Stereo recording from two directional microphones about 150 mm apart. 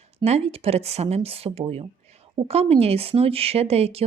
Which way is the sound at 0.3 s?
45° right (ahead or behind).